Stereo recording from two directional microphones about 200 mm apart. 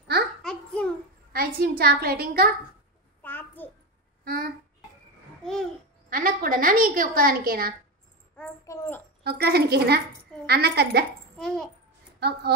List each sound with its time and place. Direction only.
0.4 s babbling: 5° left (ahead or behind)
1.3 s a woman's voice: 50° right (ahead or behind)
3.2 s a sound: 10° left (ahead or behind)
4.2 s a sound: 50° right (ahead or behind)
5.4 s babbling: 5° left (ahead or behind)
6.0 s a woman's voice: 45° right (ahead or behind)
8.4 s a sound: 15° left (ahead or behind)
9.2 s a woman's voice: 50° right (ahead or behind)
11.3 s a child's voice: centre (ahead or behind)
12.2 s a woman's voice: 55° right (ahead or behind)